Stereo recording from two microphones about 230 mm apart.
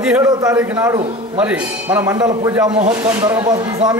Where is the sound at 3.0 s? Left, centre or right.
Centre.